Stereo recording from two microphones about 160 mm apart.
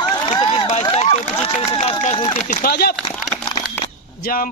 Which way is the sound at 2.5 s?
70° left (ahead or behind).